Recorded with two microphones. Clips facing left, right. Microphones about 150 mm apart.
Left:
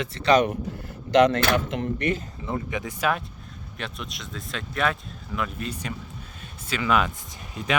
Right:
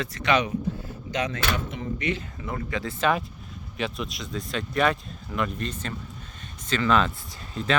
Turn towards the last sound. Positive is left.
turn(degrees=10)  # may be behind; listen again after turning